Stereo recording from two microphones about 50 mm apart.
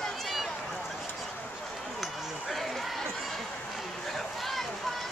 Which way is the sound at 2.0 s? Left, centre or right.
Centre.